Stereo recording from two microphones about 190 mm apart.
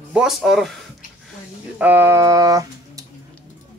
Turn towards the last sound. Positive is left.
turn(degrees=-20)  # may be behind; listen again after turning